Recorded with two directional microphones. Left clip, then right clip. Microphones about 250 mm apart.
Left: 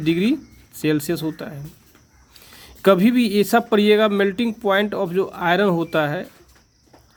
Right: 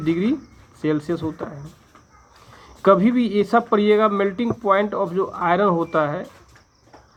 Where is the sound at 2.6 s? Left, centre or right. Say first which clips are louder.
Even; left.